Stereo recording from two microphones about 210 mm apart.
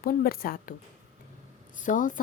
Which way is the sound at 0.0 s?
45° left (ahead or behind).